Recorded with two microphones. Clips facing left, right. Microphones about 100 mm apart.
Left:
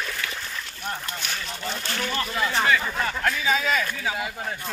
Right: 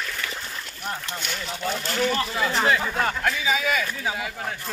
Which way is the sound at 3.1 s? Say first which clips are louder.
Even; 5° right (ahead or behind).